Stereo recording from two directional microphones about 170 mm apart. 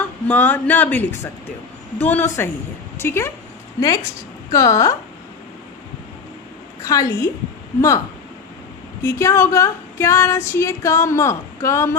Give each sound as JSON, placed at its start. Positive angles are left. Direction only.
{"t": 0.3, "sound": "a woman's voice", "side_deg": 10}
{"t": 6.8, "sound": "a woman's voice", "side_deg": 20}